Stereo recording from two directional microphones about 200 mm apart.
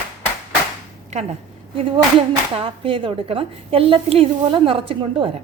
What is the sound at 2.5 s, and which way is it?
A woman's voice, 25° right (ahead or behind).